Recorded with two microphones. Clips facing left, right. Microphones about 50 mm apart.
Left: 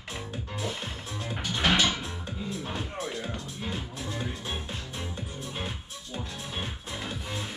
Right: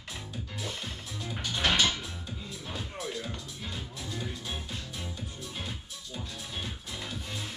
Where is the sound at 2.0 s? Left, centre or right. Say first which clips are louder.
Left 4 dB; left.